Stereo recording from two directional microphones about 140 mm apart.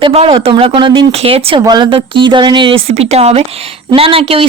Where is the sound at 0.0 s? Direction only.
45° right (ahead or behind).